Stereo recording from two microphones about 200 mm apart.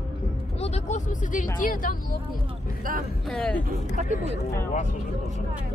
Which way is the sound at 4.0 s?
40° right (ahead or behind).